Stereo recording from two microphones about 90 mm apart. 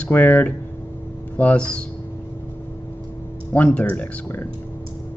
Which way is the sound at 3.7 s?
15° left (ahead or behind).